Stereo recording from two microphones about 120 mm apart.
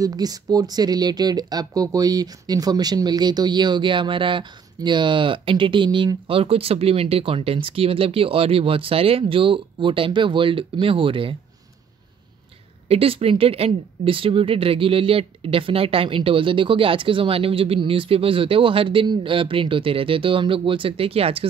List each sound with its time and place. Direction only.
0.0 s speech: 30° right (ahead or behind)
12.8 s speech: 55° right (ahead or behind)